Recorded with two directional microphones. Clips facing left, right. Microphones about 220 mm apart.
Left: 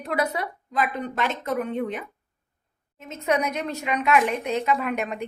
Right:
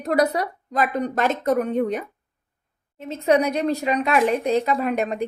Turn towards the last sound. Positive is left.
turn(degrees=-35)  # may be behind; listen again after turning